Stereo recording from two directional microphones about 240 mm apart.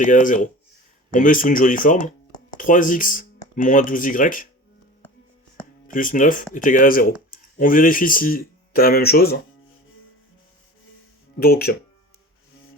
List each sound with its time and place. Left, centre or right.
0.0 s speech: left
5.9 s speech: left
11.3 s speech: left